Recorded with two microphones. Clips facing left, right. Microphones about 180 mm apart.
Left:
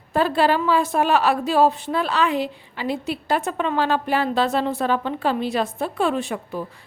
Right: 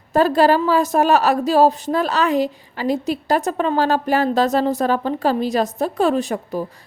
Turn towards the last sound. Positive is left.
turn(degrees=-40)  # may be behind; listen again after turning